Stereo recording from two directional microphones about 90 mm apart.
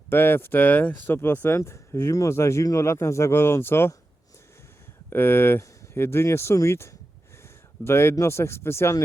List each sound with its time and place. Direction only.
0.1 s speech: 25° left (ahead or behind)
5.1 s speech: 25° left (ahead or behind)